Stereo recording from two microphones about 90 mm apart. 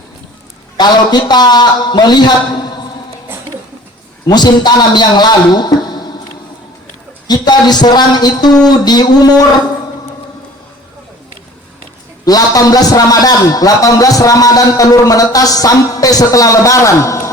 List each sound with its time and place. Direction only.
0.8 s a man's voice: 50° left (ahead or behind)
4.3 s a man's voice: 50° left (ahead or behind)
7.3 s a man's voice: 50° left (ahead or behind)
12.2 s a man's voice: 45° left (ahead or behind)